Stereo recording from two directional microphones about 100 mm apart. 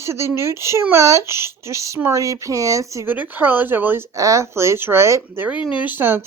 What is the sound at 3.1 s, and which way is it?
Speech, 20° right (ahead or behind).